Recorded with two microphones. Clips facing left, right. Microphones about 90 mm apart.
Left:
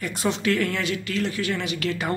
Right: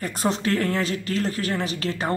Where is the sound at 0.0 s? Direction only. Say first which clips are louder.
Even; 40° right (ahead or behind).